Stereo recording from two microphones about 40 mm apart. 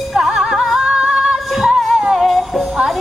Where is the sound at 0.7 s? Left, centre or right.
Centre.